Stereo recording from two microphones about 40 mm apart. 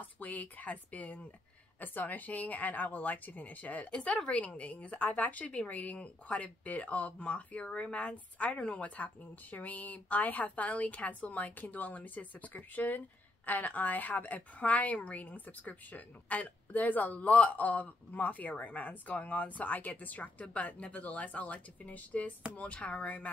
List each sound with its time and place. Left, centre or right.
0.0 s a woman's voice: left
22.6 s speech: left